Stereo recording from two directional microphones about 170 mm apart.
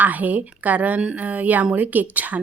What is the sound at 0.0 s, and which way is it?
A woman's voice, 10° right (ahead or behind).